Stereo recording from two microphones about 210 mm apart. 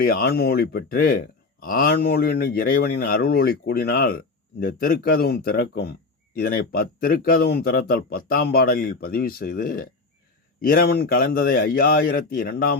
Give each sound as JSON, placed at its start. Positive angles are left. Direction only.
{"t": 0.0, "sound": "a man's voice", "side_deg": 45}